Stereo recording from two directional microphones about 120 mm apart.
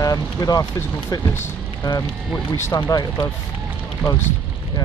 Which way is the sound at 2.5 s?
20° left (ahead or behind).